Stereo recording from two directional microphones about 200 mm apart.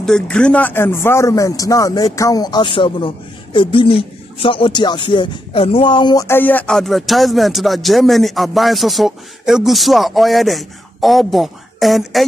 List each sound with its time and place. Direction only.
0.0 s speech: 5° left (ahead or behind)